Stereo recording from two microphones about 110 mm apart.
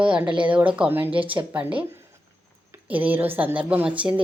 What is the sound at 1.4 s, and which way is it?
Speech, 30° right (ahead or behind).